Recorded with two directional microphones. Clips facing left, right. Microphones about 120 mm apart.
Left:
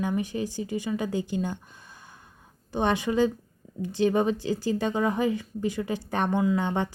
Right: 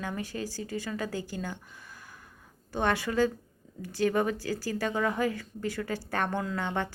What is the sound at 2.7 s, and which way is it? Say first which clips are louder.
A woman's voice: left 3 dB; 20° left (ahead or behind).